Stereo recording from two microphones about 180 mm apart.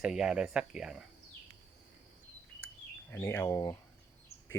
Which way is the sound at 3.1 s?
10° left (ahead or behind).